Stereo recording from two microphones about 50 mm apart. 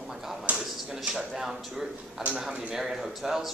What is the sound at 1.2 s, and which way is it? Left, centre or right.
Speech, centre.